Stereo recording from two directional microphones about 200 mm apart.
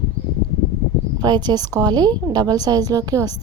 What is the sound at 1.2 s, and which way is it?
A woman's voice, 20° right (ahead or behind).